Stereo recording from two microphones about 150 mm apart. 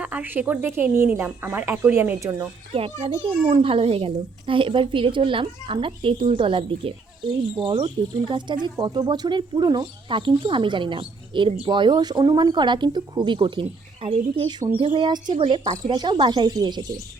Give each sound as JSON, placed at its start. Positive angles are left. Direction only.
{"t": 0.0, "sound": "a woman's voice", "side_deg": -10}
{"t": 2.7, "sound": "speech", "side_deg": -40}